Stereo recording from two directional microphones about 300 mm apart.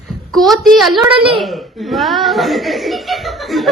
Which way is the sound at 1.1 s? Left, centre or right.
Centre.